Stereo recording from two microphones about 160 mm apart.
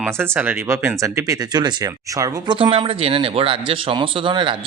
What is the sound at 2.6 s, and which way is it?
Speech, 35° right (ahead or behind).